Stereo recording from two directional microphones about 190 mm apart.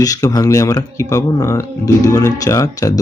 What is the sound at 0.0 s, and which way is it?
Speech, 20° left (ahead or behind).